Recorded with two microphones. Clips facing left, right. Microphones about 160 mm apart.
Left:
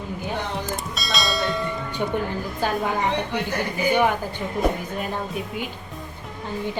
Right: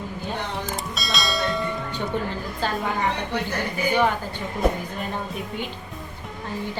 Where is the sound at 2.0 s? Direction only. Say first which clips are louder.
Left 4 dB; 10° left (ahead or behind).